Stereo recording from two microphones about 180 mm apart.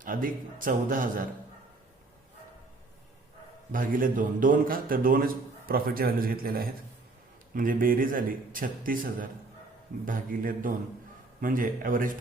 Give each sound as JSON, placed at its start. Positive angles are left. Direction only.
{"t": 0.0, "sound": "a man's voice", "side_deg": -50}
{"t": 3.7, "sound": "a man's voice", "side_deg": -50}